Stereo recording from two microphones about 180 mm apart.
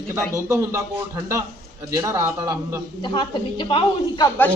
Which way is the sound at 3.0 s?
25° left (ahead or behind).